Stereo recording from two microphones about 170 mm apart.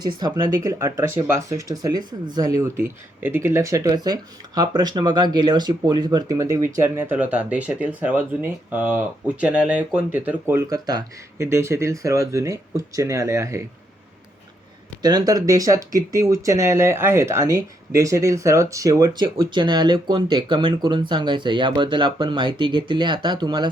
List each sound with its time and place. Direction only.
0.0 s speech: 25° right (ahead or behind)
15.0 s speech: 25° right (ahead or behind)